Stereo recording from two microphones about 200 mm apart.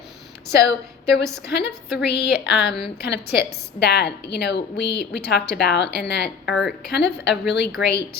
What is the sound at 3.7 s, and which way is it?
A woman's voice, 55° left (ahead or behind).